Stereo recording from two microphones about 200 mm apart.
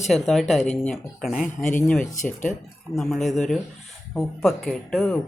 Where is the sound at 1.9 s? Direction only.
5° left (ahead or behind).